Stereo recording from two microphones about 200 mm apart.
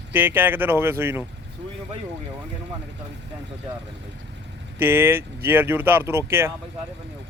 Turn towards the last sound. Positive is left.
turn(degrees=-10)  # may be behind; listen again after turning